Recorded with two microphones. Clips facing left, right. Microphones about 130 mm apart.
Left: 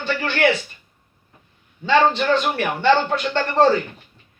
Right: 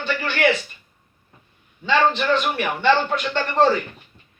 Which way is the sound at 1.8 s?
30° left (ahead or behind).